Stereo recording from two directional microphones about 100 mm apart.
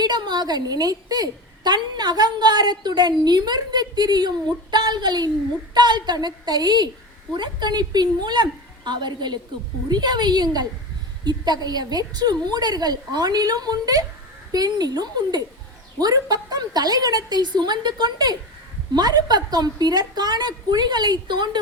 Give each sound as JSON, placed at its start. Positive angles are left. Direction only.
{"t": 0.0, "sound": "a woman's voice", "side_deg": -45}